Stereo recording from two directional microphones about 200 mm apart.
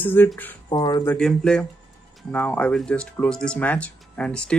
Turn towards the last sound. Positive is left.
turn(degrees=5)  # may be behind; listen again after turning